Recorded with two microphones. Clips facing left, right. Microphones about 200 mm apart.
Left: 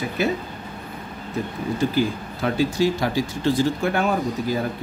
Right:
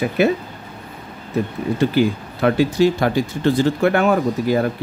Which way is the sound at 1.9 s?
65° right (ahead or behind).